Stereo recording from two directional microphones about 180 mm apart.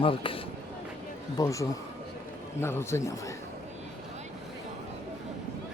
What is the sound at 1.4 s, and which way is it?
A man's voice, 20° left (ahead or behind).